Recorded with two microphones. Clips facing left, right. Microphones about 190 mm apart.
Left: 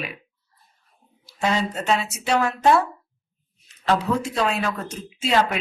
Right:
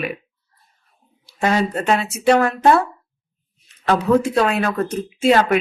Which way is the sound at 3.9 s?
60° right (ahead or behind).